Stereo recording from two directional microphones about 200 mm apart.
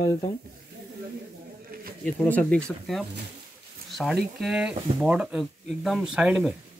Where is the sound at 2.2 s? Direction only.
5° left (ahead or behind).